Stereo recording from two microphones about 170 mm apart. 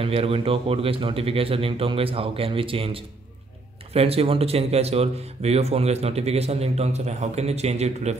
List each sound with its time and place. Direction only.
0.0 s speech: 35° right (ahead or behind)